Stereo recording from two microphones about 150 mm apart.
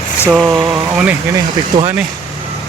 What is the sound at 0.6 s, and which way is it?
Speech, 5° right (ahead or behind).